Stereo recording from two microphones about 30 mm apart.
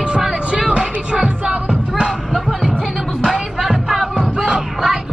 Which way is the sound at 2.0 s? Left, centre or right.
Centre.